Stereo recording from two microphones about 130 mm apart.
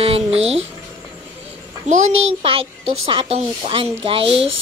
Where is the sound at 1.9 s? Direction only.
65° right (ahead or behind).